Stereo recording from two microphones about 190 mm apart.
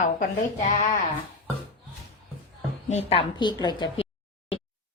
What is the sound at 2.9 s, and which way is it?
A woman's voice, 30° left (ahead or behind).